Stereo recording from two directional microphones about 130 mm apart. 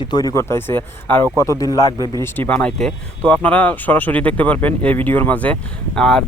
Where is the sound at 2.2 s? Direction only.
15° left (ahead or behind).